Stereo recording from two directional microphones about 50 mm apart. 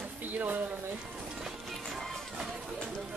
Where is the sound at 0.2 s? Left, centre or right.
Right.